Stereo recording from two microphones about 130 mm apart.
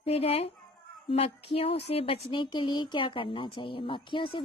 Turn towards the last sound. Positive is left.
turn(degrees=40)  # may be behind; listen again after turning